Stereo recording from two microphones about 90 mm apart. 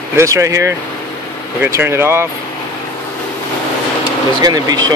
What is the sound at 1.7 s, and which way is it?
Speech, 25° right (ahead or behind).